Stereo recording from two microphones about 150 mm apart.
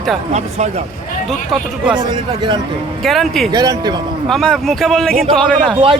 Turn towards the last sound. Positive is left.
turn(degrees=5)  # may be behind; listen again after turning